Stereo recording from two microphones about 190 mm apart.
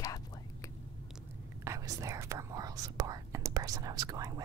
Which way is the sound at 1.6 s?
15° right (ahead or behind).